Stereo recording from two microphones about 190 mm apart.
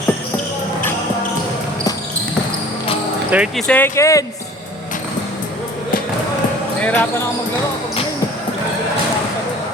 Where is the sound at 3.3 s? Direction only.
5° right (ahead or behind).